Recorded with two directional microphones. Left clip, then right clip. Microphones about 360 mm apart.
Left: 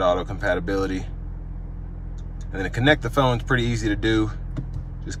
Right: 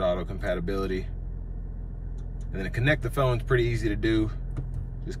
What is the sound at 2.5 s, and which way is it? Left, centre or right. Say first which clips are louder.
Speech: left 7 dB; centre.